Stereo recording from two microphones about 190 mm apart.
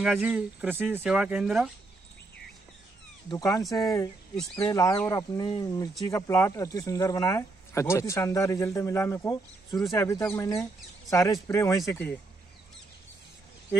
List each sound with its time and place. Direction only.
0.0 s speech: 5° right (ahead or behind)
3.3 s speech: 20° left (ahead or behind)
3.6 s speech: centre (ahead or behind)
4.6 s speech: 20° left (ahead or behind)